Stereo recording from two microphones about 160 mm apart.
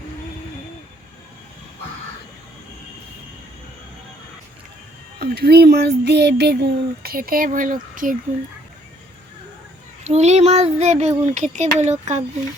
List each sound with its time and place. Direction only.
5.2 s speech: 80° right; by 8.1 s 55° right (ahead or behind)
10.0 s speech: 45° right (ahead or behind)